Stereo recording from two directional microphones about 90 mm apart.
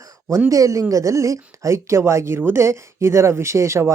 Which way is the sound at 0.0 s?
30° right (ahead or behind).